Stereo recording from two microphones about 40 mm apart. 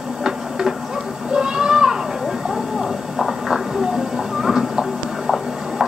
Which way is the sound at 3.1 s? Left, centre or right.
Centre.